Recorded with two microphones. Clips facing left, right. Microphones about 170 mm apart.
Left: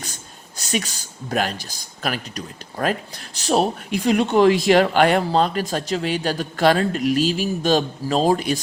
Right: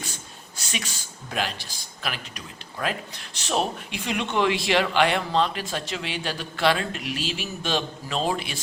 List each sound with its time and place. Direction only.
0.0 s speech: 40° left (ahead or behind)